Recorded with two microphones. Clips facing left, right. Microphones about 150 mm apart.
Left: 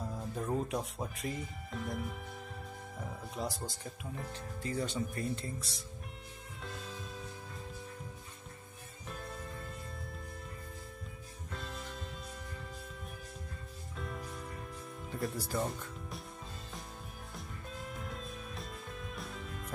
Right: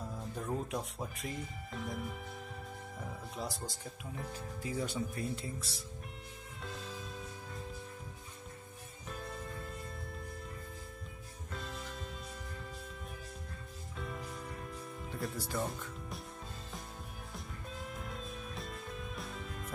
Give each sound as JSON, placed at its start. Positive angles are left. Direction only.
{"t": 0.3, "sound": "speech", "side_deg": 0}
{"t": 6.6, "sound": "music", "side_deg": 0}
{"t": 9.1, "sound": "music", "side_deg": 0}
{"t": 11.5, "sound": "music", "side_deg": 0}
{"t": 13.9, "sound": "music", "side_deg": 0}
{"t": 15.0, "sound": "speech", "side_deg": 0}
{"t": 17.7, "sound": "music", "side_deg": 0}